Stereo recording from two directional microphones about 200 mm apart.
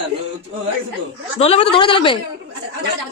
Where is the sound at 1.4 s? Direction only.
30° left (ahead or behind).